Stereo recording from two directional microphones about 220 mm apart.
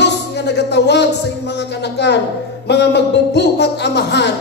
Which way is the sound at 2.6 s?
50° left (ahead or behind).